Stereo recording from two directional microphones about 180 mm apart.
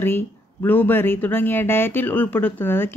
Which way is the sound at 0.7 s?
10° left (ahead or behind).